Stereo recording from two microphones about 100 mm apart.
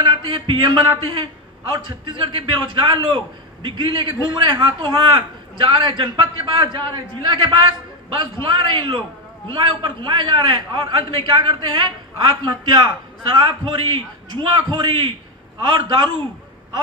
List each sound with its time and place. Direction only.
0.1 s a man's voice: 60° right (ahead or behind)